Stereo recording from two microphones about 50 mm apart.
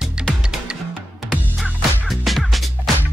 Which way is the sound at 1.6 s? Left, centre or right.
Centre.